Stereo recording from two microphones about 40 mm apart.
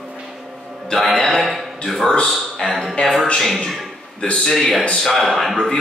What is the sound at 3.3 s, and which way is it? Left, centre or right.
Speech, centre.